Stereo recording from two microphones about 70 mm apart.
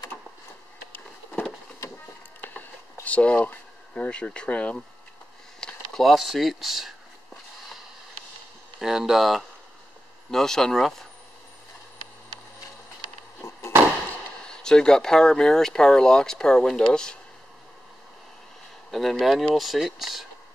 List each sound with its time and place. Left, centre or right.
2.4 s a sound: left
3.9 s speech: centre
5.6 s a sound: centre
5.9 s speech: centre
8.7 s speech: centre
13.4 s chop: left
14.5 s speech: centre
18.9 s speech: centre